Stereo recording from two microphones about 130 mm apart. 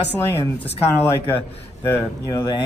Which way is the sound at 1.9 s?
30° left (ahead or behind).